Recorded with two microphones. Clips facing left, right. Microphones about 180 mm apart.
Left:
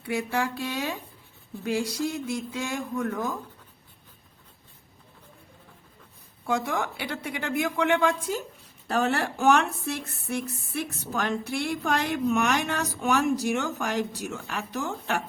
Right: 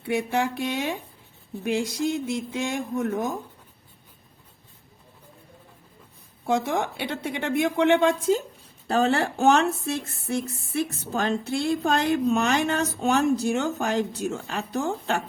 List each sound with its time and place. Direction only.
0.0 s speech: 25° right (ahead or behind)
6.4 s speech: 25° right (ahead or behind)